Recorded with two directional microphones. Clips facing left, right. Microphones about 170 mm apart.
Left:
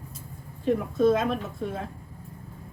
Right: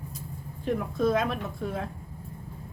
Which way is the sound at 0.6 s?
Centre (ahead or behind).